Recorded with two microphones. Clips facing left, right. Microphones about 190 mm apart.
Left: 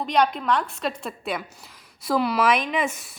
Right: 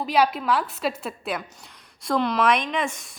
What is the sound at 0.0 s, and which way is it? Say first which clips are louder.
A woman's voice: even; 5° right (ahead or behind).